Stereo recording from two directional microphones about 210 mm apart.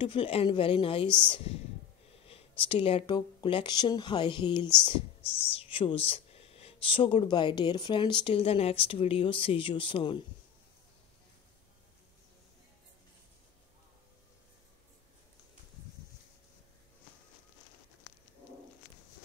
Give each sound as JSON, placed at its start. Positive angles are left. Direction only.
{"t": 0.0, "sound": "speech", "side_deg": 25}